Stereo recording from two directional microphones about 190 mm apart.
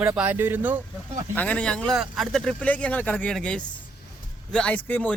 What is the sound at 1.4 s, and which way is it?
Speech, 5° left (ahead or behind).